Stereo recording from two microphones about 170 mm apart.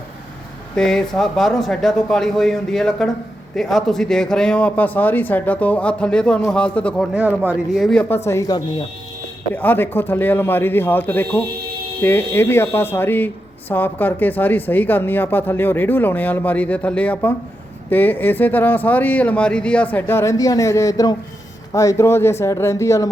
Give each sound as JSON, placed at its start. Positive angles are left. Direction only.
{"t": 0.8, "sound": "speech", "side_deg": 5}
{"t": 7.1, "sound": "speech", "side_deg": -10}
{"t": 8.0, "sound": "speech", "side_deg": 15}